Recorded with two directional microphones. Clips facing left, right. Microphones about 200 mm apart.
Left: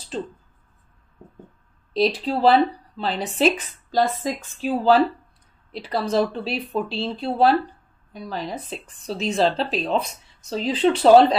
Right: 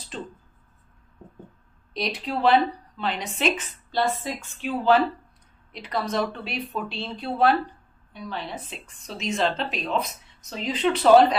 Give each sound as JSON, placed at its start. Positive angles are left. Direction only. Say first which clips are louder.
{"t": 2.0, "sound": "speech", "louder": "left 7 dB", "side_deg": 30}